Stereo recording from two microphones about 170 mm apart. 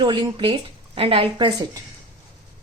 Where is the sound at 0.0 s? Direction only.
30° right (ahead or behind).